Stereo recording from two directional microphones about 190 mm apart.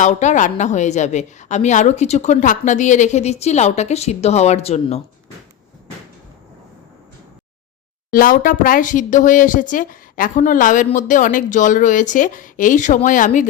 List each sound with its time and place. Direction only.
0.0 s a woman's voice: 40° left (ahead or behind)
8.1 s speech: 50° left (ahead or behind)